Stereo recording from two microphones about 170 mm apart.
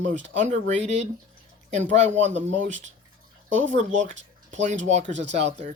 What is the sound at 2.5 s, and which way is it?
Speech, 45° right (ahead or behind).